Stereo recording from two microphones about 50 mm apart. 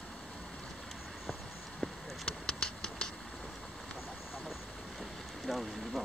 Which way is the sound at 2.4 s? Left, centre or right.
Centre.